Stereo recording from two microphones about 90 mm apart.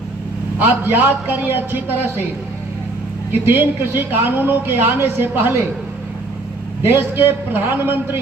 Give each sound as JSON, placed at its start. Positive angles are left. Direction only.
{"t": 0.6, "sound": "a woman's voice", "side_deg": -20}
{"t": 3.4, "sound": "a woman's voice", "side_deg": -20}
{"t": 6.8, "sound": "a woman's voice", "side_deg": -25}